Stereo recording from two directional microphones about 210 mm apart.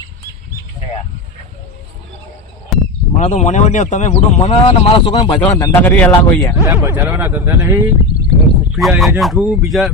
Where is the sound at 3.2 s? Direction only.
35° left (ahead or behind).